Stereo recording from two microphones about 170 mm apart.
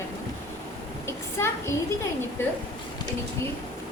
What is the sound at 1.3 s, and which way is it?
Speech, 15° left (ahead or behind).